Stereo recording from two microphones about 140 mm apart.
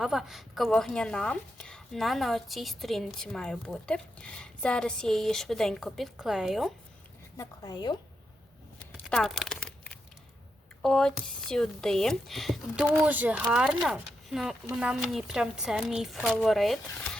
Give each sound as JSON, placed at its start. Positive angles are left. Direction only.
{"t": 0.0, "sound": "a woman's voice", "side_deg": -5}
{"t": 7.3, "sound": "a woman's voice", "side_deg": 30}
{"t": 9.0, "sound": "crumpling", "side_deg": 5}
{"t": 10.8, "sound": "a woman's voice", "side_deg": 5}